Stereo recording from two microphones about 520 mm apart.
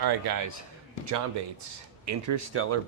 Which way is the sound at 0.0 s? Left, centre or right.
Right.